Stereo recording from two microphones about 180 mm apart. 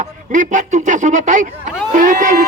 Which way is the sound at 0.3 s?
45° right (ahead or behind).